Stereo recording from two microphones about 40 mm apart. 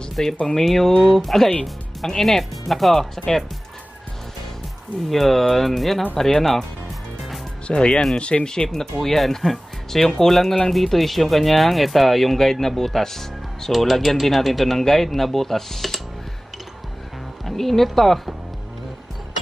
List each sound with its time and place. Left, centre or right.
0.1 s speech: centre
5.1 s speech: centre
7.6 s speech: left
8.7 s speech: centre
17.5 s speech: centre